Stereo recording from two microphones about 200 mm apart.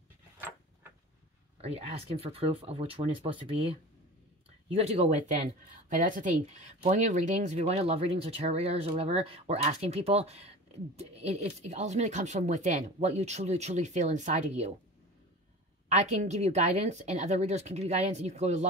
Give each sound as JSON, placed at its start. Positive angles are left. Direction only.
{"t": 1.6, "sound": "speech", "side_deg": -30}
{"t": 15.9, "sound": "speech", "side_deg": -35}